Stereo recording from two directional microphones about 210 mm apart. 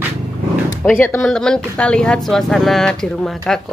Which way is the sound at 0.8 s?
10° left (ahead or behind).